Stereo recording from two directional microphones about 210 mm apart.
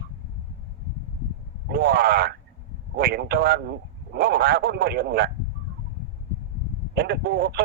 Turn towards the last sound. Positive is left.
turn(degrees=-50)  # may be behind; listen again after turning